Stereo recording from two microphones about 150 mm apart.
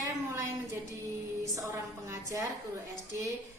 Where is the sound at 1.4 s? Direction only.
20° right (ahead or behind).